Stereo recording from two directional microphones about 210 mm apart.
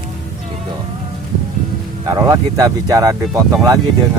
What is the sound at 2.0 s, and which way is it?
Speech, 15° right (ahead or behind).